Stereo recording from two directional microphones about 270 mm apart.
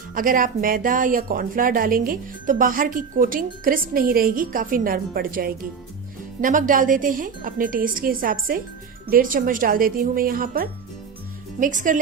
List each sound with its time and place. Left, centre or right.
0.1 s speech: right